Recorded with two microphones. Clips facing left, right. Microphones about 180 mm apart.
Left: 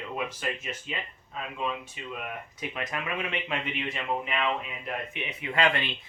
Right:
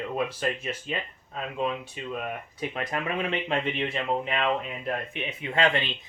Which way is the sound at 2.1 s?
40° right (ahead or behind).